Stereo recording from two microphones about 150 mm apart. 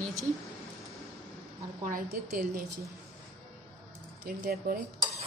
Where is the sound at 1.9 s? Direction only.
65° right (ahead or behind).